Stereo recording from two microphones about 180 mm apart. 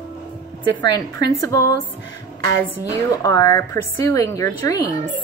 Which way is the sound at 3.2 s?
15° left (ahead or behind).